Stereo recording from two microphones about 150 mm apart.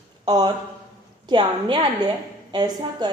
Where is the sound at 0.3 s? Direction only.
25° right (ahead or behind).